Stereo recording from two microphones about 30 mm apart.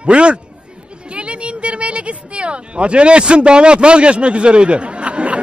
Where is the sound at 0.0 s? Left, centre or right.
Right.